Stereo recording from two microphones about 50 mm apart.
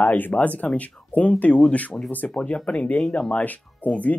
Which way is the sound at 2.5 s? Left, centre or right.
Centre.